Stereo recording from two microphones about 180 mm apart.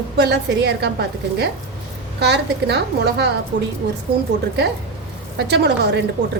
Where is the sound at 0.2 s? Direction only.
70° right (ahead or behind).